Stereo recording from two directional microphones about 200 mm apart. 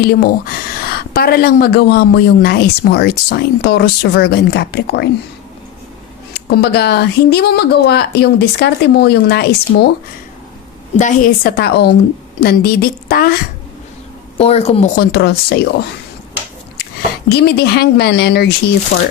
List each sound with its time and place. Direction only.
0.0 s speech: 50° left (ahead or behind)
6.3 s speech: 55° left (ahead or behind)
10.9 s speech: 40° left (ahead or behind)
14.3 s a woman's voice: 30° left (ahead or behind)
14.9 s speech: 50° left (ahead or behind)
17.2 s speech: 55° left (ahead or behind)